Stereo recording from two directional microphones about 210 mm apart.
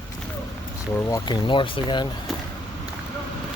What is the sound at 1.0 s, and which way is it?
Speech, 15° left (ahead or behind).